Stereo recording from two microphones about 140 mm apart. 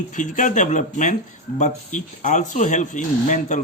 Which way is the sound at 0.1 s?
65° left (ahead or behind).